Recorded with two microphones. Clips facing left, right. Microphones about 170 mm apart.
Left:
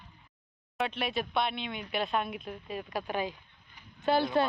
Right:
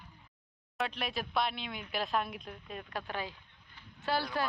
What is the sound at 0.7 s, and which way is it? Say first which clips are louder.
Speech: left 4 dB; centre (ahead or behind).